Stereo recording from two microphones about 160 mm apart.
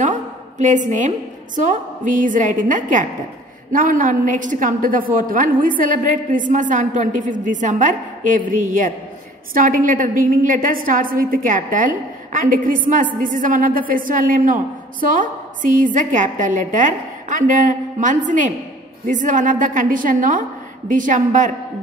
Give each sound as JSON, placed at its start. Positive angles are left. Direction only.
{"t": 0.0, "sound": "a woman's voice", "side_deg": -50}